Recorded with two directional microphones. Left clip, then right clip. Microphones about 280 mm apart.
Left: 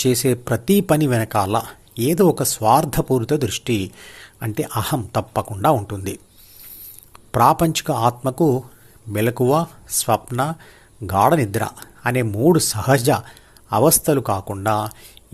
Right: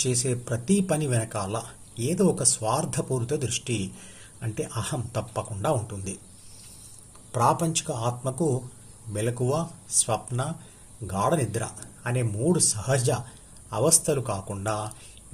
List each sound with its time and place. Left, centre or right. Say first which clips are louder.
0.0 s speech: left 9 dB; left
7.3 s speech: left 8 dB; left